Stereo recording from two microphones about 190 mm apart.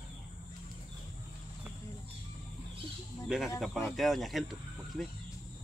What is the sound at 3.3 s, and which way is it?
Speech, centre (ahead or behind).